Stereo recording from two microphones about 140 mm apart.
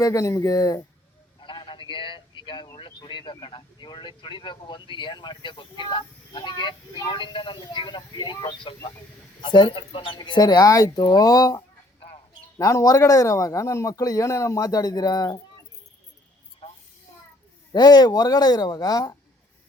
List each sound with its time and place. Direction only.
0.0 s speech: 25° left (ahead or behind)
17.7 s speech: 30° left (ahead or behind)